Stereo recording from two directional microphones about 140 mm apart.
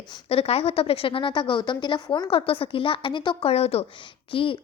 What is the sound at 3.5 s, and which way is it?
A woman's voice, 45° left (ahead or behind).